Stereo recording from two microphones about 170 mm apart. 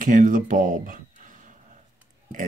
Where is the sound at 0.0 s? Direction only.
50° right (ahead or behind).